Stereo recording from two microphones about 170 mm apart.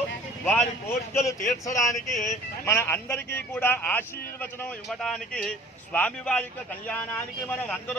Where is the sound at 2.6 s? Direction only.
15° left (ahead or behind).